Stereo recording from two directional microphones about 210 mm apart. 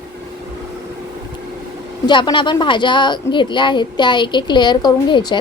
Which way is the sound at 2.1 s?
20° left (ahead or behind).